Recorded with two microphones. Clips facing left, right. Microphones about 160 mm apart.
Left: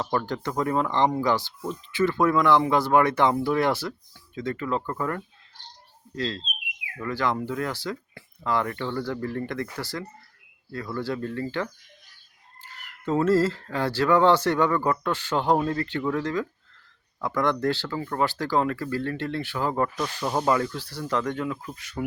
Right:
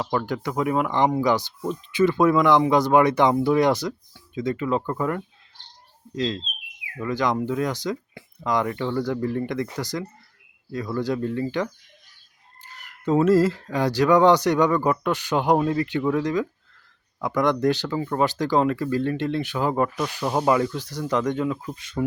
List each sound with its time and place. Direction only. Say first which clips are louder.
0.3 s speech: right 2 dB; 10° right (ahead or behind)